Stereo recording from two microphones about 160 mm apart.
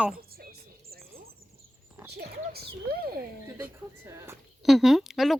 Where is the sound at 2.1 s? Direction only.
85° right.